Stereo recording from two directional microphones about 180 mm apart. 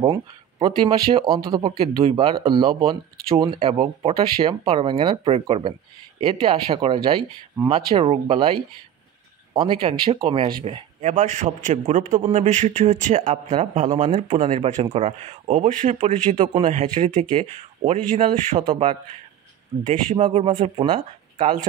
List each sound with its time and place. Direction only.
0.0 s speech: 25° right (ahead or behind)
11.0 s a man's voice: 40° right (ahead or behind)
20.2 s speech: 30° right (ahead or behind)